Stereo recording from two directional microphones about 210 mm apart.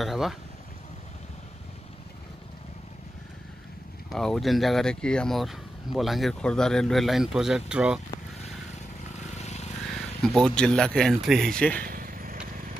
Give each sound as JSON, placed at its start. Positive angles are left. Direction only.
{"t": 0.0, "sound": "speech", "side_deg": 0}
{"t": 4.1, "sound": "speech", "side_deg": 0}
{"t": 9.4, "sound": "vehicle", "side_deg": 30}
{"t": 10.2, "sound": "speech", "side_deg": 0}
{"t": 11.8, "sound": "vehicle", "side_deg": -40}